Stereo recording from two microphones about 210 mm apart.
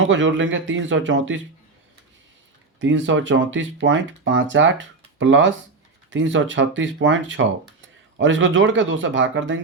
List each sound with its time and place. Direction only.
0.0 s speech: 65° right (ahead or behind)
2.8 s speech: 65° right (ahead or behind)